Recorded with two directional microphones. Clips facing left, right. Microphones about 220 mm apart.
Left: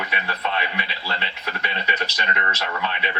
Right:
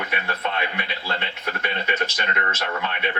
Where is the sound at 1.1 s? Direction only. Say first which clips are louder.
Right 2 dB; 50° right (ahead or behind).